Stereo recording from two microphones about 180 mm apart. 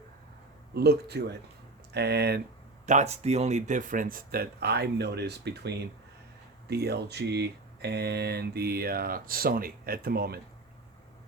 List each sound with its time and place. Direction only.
0.7 s speech: 65° right (ahead or behind)
2.8 s speech: 40° right (ahead or behind); by 10.4 s 60° right (ahead or behind)